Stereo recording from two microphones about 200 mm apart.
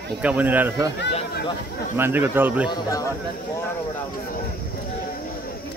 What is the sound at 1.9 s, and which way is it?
Speech, 10° right (ahead or behind).